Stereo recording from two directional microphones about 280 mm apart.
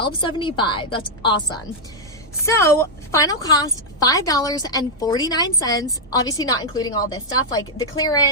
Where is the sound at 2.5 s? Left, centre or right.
Centre.